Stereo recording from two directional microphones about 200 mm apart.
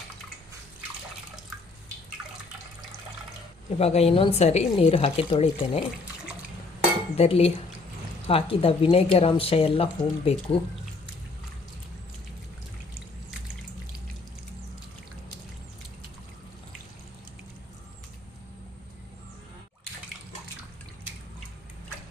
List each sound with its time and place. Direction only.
3.8 s speech: 30° left (ahead or behind)
7.2 s a woman's voice: 30° left (ahead or behind)